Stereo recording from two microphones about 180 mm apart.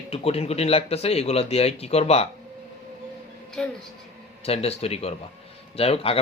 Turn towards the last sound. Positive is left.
turn(degrees=35)  # may be behind; listen again after turning